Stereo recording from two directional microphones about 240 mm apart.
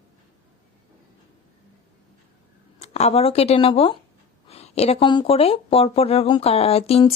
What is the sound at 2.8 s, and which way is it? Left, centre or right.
Speech, left.